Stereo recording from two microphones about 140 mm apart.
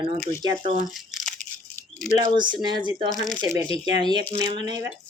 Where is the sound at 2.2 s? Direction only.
35° right (ahead or behind).